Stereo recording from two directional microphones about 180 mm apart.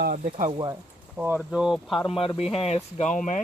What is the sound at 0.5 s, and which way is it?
Speech, 25° right (ahead or behind).